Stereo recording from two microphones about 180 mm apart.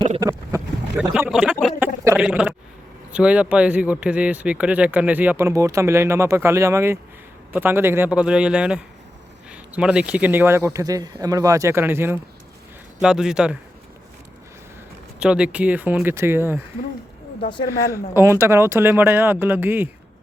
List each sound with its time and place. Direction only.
0.2 s boat: 15° right (ahead or behind)
1.3 s a sound: 5° right (ahead or behind)
3.1 s a man's voice: 5° right (ahead or behind)
15.2 s speech: 5° right (ahead or behind)
18.1 s speech: 10° right (ahead or behind)